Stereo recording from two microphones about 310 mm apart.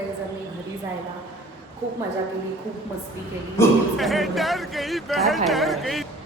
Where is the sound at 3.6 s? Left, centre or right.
Centre.